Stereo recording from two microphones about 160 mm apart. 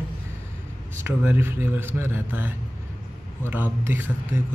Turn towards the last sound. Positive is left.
turn(degrees=-15)  # may be behind; listen again after turning